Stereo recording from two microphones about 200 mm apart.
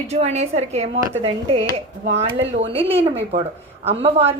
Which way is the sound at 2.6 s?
30° right (ahead or behind).